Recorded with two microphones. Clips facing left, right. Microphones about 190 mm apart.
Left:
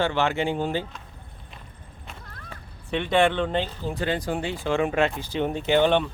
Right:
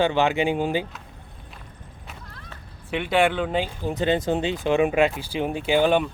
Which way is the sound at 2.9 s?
5° right (ahead or behind).